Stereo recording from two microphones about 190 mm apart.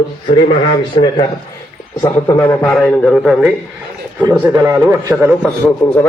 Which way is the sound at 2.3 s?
15° left (ahead or behind).